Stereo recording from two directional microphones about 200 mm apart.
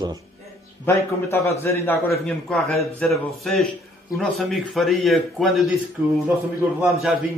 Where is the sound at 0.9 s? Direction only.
10° left (ahead or behind).